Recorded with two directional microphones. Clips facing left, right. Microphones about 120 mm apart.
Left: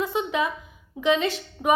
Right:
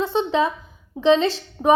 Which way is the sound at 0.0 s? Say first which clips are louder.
Right 5 dB; 30° right (ahead or behind).